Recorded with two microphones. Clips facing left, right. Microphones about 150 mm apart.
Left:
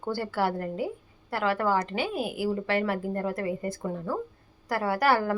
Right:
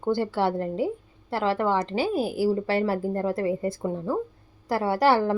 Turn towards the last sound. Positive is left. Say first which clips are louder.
# right 3 dB
turn(degrees=-25)  # may be behind; listen again after turning